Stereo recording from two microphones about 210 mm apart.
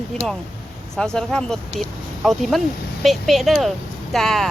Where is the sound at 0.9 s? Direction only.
5° left (ahead or behind).